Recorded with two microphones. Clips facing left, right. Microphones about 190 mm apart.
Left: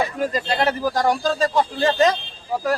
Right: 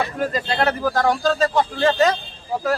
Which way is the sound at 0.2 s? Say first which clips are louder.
Even; 10° left (ahead or behind).